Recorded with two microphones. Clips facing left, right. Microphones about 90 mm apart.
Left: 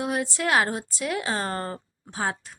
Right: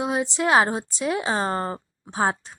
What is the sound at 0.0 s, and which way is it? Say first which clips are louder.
Speech: right 3 dB; 20° right (ahead or behind).